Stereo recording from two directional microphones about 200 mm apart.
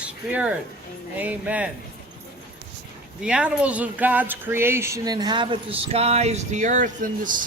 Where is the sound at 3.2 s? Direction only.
5° right (ahead or behind); by 7.3 s 40° right (ahead or behind).